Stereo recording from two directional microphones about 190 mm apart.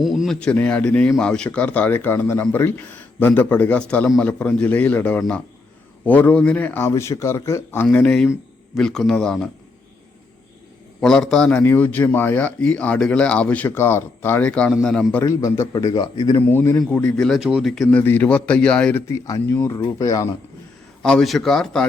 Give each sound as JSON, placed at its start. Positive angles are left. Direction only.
{"t": 0.0, "sound": "a man's voice", "side_deg": 0}
{"t": 11.0, "sound": "a man's voice", "side_deg": 0}
{"t": 15.2, "sound": "a man's voice", "side_deg": 15}
{"t": 19.2, "sound": "a man's voice", "side_deg": 15}
{"t": 21.0, "sound": "a man's voice", "side_deg": 5}